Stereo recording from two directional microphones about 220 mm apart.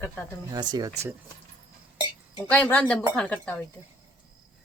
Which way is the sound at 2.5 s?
5° left (ahead or behind).